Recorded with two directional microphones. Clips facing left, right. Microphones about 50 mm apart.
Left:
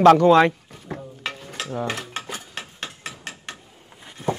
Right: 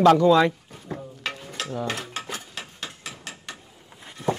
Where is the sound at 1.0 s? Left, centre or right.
Centre.